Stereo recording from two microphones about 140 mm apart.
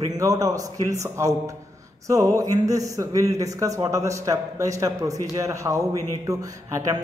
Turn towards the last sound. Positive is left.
turn(degrees=-25)  # may be behind; listen again after turning